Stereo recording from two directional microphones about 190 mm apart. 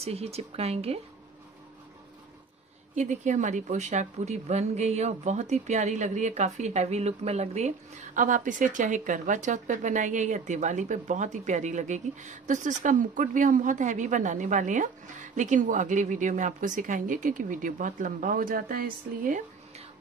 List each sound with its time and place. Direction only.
0.0 s a woman's voice: 30° right (ahead or behind)
3.0 s a woman's voice: 40° right (ahead or behind)